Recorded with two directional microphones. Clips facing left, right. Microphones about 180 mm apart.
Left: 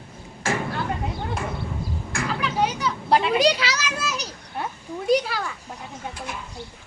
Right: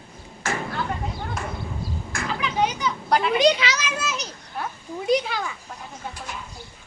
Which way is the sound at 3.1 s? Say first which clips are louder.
Left 2 dB; 25° left (ahead or behind).